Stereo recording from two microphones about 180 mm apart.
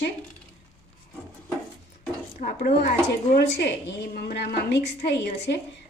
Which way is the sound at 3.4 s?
65° left (ahead or behind).